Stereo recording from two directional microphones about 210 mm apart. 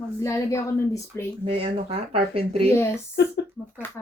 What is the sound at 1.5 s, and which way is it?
Speech, 25° right (ahead or behind).